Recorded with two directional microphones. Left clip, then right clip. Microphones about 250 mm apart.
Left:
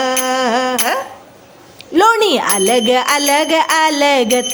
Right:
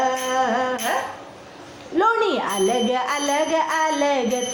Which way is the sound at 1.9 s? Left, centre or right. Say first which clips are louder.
Left 8 dB; left.